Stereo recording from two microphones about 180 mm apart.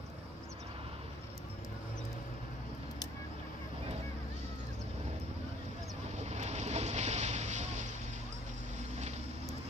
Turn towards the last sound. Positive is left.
turn(degrees=-40)  # may be behind; listen again after turning